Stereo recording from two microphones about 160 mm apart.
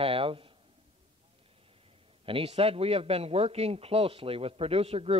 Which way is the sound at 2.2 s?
35° right (ahead or behind).